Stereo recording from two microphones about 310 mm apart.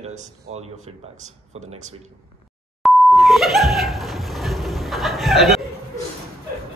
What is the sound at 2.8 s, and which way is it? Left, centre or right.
Beep, centre.